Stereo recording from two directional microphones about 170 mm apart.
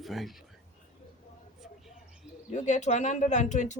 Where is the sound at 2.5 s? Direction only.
45° left (ahead or behind).